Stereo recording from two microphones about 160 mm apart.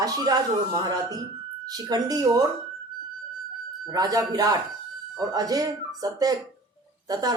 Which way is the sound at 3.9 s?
25° right (ahead or behind).